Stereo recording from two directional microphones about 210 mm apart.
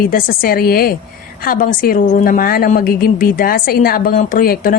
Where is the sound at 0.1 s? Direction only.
45° left (ahead or behind).